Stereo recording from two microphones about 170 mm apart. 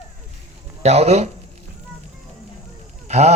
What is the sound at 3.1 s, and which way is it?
Goose, 40° right (ahead or behind).